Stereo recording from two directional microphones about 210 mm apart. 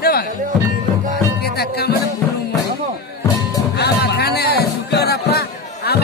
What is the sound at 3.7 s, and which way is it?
Music, 50° left (ahead or behind).